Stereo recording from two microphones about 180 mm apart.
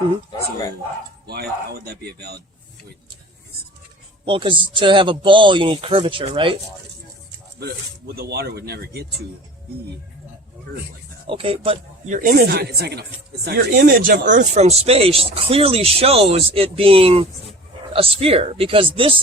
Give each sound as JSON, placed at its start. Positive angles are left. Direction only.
{"t": 1.3, "sound": "speech", "side_deg": -60}
{"t": 4.3, "sound": "speech", "side_deg": -30}
{"t": 7.6, "sound": "speech", "side_deg": -60}
{"t": 11.3, "sound": "speech", "side_deg": -30}
{"t": 12.0, "sound": "speech", "side_deg": -45}
{"t": 12.5, "sound": "speech", "side_deg": -65}